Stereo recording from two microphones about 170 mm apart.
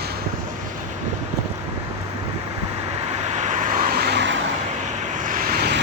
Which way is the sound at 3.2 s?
45° right (ahead or behind).